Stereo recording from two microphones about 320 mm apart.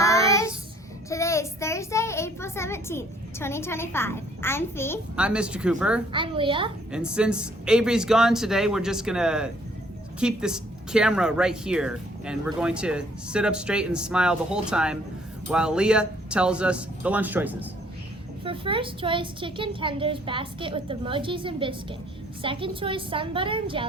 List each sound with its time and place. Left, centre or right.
0.0 s child singing: centre
1.1 s a child's voice: centre
5.1 s a man's voice: centre
6.1 s a woman's voice: centre
6.9 s a man's voice: centre
18.4 s a woman's voice: centre